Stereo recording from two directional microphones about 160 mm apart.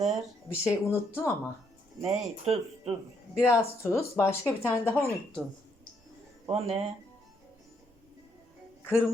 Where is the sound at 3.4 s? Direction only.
15° left (ahead or behind).